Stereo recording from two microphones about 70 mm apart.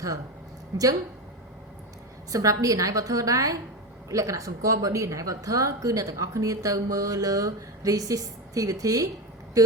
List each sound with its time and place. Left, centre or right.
2.3 s a woman's voice: right